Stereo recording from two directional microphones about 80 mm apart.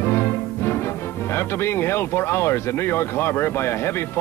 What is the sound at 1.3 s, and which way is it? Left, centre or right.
Speech, left.